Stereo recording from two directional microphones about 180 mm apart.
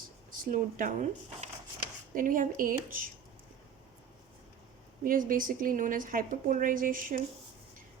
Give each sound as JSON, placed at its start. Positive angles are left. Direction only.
{"t": 0.3, "sound": "a woman's voice", "side_deg": -45}
{"t": 5.0, "sound": "a woman's voice", "side_deg": -50}